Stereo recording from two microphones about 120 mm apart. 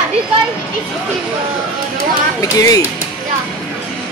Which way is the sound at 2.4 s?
30° left (ahead or behind).